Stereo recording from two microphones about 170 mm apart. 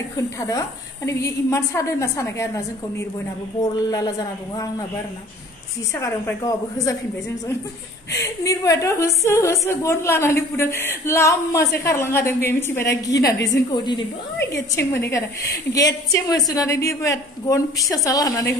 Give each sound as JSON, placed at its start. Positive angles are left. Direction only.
{"t": 0.4, "sound": "a woman's voice", "side_deg": 20}
{"t": 5.9, "sound": "a woman's voice", "side_deg": 15}
{"t": 8.1, "sound": "a woman's voice", "side_deg": 15}